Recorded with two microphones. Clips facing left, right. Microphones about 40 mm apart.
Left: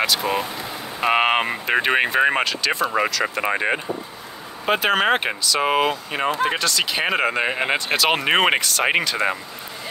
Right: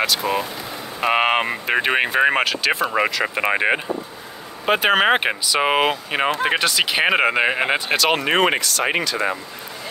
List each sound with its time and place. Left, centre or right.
0.0 s speech: centre
8.2 s speech: centre